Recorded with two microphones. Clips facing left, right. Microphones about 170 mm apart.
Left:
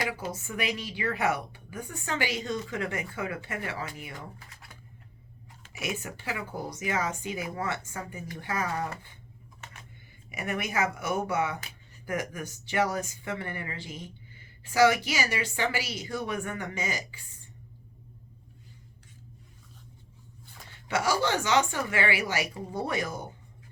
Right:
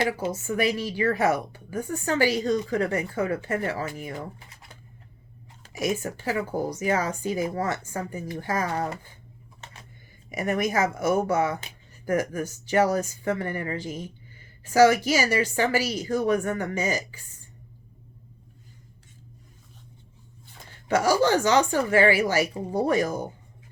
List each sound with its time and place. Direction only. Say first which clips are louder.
0.3 s speech: right 7 dB; 40° right (ahead or behind)
5.6 s speech: right 8 dB; 40° right (ahead or behind)
10.2 s speech: right 7 dB; 40° right (ahead or behind)
20.8 s speech: right 6 dB; 40° right (ahead or behind)